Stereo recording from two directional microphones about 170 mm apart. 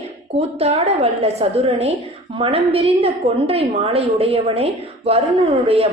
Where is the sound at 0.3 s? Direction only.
40° right (ahead or behind).